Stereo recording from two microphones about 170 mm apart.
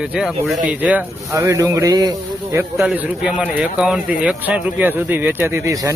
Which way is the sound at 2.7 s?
10° right (ahead or behind).